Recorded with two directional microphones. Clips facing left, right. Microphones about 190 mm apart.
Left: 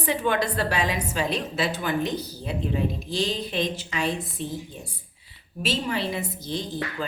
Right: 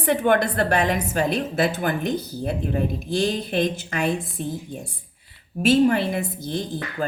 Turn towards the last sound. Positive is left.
turn(degrees=-50)  # may be behind; listen again after turning